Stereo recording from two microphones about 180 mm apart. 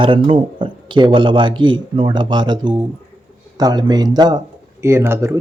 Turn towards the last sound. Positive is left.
turn(degrees=-15)  # may be behind; listen again after turning